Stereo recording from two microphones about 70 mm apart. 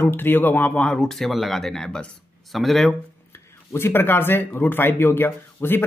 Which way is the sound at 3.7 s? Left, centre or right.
Left.